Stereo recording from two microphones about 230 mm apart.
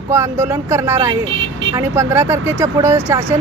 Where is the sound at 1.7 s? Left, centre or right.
Centre.